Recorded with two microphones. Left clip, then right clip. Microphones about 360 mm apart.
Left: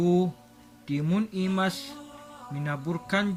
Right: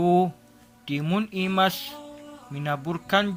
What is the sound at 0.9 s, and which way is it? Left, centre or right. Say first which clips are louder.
Speech: right 2 dB; centre.